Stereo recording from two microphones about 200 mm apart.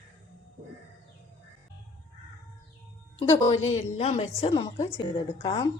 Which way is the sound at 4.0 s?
30° left (ahead or behind).